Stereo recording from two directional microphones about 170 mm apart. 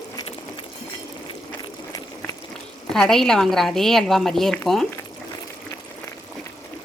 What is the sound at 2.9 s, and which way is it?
A woman's voice, centre (ahead or behind).